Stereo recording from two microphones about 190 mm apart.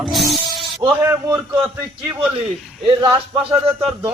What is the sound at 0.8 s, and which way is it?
Speech, 20° right (ahead or behind).